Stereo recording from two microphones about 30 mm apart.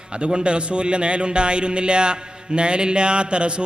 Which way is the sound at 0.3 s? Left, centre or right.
Right.